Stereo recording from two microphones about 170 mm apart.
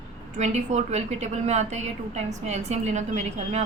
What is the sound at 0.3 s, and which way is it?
A woman's voice, 40° right (ahead or behind).